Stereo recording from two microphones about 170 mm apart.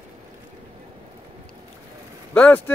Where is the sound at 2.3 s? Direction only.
10° left (ahead or behind).